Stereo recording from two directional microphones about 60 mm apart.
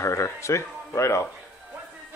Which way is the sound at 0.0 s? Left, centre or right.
Left.